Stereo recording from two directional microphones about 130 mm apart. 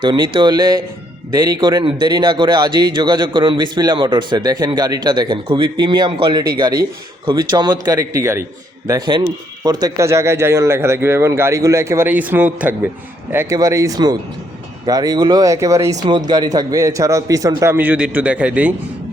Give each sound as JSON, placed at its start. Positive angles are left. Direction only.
{"t": 0.0, "sound": "speech", "side_deg": -40}
{"t": 8.9, "sound": "speech", "side_deg": -35}